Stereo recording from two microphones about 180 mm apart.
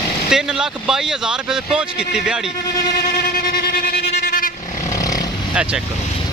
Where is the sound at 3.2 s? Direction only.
55° left (ahead or behind).